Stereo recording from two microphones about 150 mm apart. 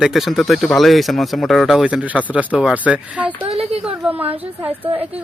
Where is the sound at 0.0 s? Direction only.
Centre (ahead or behind).